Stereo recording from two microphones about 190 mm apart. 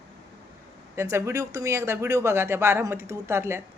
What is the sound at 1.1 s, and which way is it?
A woman's voice, 15° right (ahead or behind).